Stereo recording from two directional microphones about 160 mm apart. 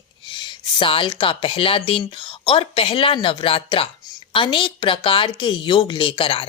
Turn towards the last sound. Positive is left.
turn(degrees=35)  # may be behind; listen again after turning